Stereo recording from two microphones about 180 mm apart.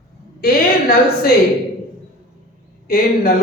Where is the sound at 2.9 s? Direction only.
55° left (ahead or behind).